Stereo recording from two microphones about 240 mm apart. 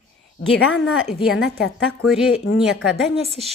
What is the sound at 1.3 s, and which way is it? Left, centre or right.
Speech, left.